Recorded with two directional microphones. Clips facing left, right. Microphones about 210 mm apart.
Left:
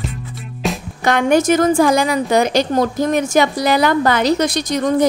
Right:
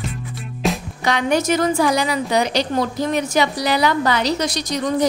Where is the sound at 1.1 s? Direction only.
50° left (ahead or behind).